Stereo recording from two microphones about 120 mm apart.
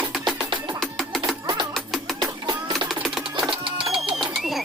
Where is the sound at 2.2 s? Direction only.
35° right (ahead or behind).